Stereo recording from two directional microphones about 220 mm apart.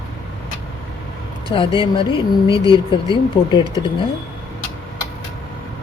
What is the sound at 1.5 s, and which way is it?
Speech, 25° left (ahead or behind).